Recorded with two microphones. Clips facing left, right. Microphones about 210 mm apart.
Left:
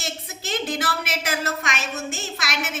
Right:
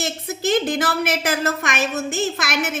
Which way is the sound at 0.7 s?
50° right (ahead or behind).